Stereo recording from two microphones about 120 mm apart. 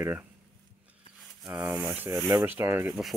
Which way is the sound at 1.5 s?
20° right (ahead or behind).